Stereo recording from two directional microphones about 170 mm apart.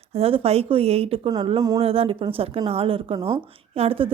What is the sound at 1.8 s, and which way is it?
A woman's voice, 35° right (ahead or behind).